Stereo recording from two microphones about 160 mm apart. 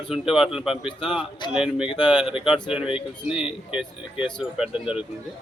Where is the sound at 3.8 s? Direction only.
5° right (ahead or behind).